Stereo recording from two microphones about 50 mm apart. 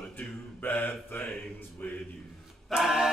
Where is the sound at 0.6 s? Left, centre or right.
Left.